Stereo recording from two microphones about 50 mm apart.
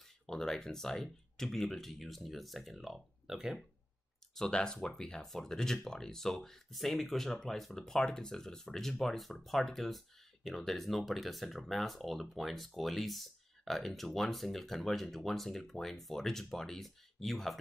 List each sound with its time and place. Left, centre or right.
0.3 s speech: centre
4.4 s speech: centre